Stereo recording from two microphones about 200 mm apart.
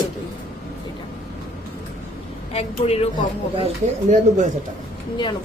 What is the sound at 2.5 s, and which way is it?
Speech, 30° left (ahead or behind).